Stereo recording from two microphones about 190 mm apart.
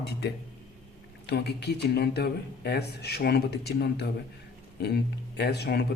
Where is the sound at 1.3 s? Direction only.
60° left (ahead or behind).